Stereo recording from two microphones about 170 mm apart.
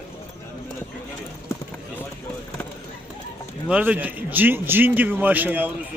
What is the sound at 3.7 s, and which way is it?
A man's voice, 10° right (ahead or behind).